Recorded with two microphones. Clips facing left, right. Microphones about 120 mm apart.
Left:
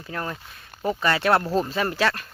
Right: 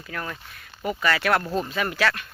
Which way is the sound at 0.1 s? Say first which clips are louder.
Left 2 dB; 25° left (ahead or behind).